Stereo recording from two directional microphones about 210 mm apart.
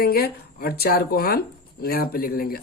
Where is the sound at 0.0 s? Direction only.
45° left (ahead or behind).